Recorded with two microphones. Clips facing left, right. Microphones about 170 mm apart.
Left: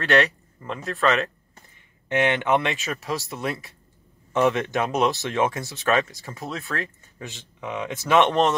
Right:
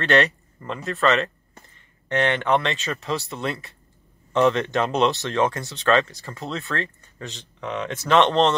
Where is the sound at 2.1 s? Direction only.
15° left (ahead or behind).